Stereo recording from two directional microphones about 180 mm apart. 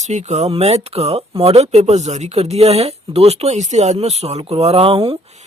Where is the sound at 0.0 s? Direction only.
40° right (ahead or behind).